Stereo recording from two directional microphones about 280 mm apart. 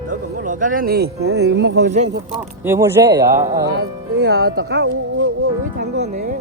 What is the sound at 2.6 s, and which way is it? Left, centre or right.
Speech, centre.